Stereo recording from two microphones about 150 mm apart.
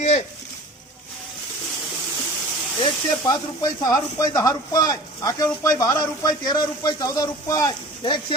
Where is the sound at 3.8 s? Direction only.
25° left (ahead or behind).